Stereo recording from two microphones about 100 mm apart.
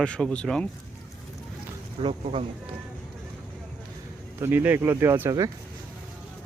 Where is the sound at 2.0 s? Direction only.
70° right (ahead or behind).